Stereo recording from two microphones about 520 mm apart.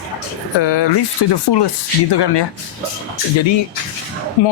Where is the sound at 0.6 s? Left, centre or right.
Left.